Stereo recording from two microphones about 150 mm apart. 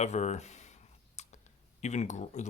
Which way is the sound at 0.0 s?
50° left (ahead or behind).